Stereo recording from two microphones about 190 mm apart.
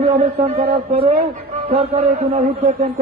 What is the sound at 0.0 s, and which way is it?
A man's voice, 35° right (ahead or behind).